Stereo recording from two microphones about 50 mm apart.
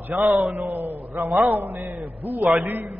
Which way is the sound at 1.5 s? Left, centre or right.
Right.